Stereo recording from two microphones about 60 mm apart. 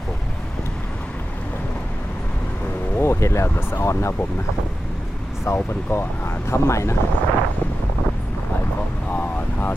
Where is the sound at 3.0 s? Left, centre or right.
Left.